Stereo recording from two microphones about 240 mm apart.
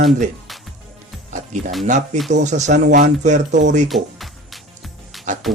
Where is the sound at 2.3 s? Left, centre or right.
Right.